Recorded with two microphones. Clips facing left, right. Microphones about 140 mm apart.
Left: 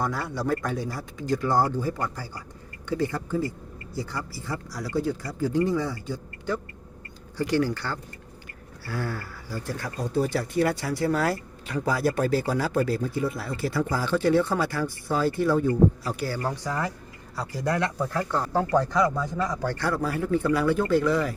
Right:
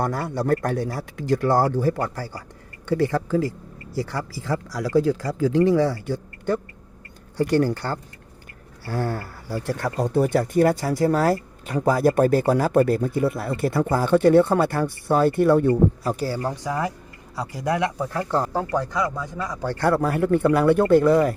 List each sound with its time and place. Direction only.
0.0 s a man's voice: 55° right (ahead or behind); by 2.4 s 70° right (ahead or behind)
2.9 s speech: 80° right
3.9 s speech: 75° right (ahead or behind)
7.3 s speech: 50° right (ahead or behind)
9.6 s speech: 65° right (ahead or behind)
16.0 s speech: 35° right (ahead or behind)
16.4 s speech: 15° right (ahead or behind)
18.3 s speech: 35° right (ahead or behind)
18.5 s speech: 15° right (ahead or behind)
19.7 s speech: 55° right (ahead or behind)